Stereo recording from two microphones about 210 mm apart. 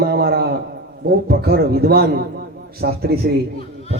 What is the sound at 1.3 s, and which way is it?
Speech, 50° right (ahead or behind).